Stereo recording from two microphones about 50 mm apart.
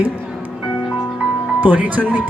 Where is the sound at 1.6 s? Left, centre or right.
Right.